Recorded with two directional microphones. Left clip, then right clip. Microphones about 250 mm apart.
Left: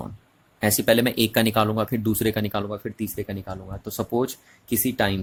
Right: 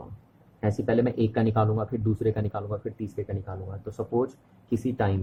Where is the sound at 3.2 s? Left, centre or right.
Left.